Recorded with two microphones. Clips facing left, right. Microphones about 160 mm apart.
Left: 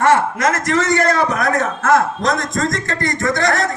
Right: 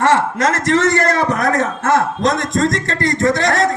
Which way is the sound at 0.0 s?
80° right.